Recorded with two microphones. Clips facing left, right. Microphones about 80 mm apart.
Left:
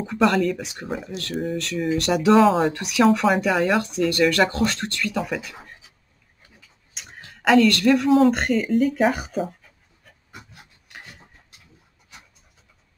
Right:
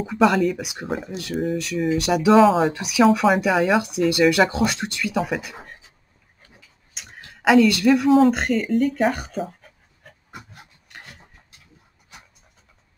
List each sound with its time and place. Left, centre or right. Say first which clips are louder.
0.0 s speech: right 2 dB; centre
0.6 s speech: right 2 dB; centre
0.8 s speech: right 2 dB; centre
6.9 s speech: even; centre
9.6 s dog: right 5 dB; right